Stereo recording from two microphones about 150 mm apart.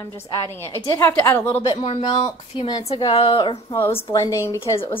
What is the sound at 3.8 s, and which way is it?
A woman's voice, 15° left (ahead or behind).